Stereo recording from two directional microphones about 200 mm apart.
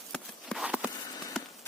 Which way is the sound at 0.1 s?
Centre (ahead or behind).